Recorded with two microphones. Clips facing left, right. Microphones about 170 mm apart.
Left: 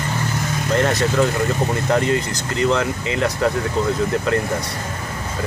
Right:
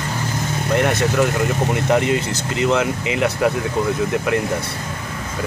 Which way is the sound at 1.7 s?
15° right (ahead or behind).